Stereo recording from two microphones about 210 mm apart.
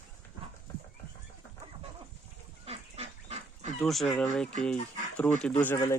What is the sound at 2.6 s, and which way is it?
Goose, 30° right (ahead or behind).